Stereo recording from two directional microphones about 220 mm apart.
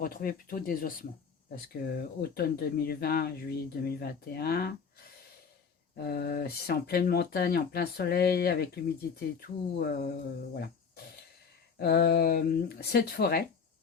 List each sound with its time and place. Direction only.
0.0 s speech: 40° left (ahead or behind)
6.0 s speech: 45° left (ahead or behind)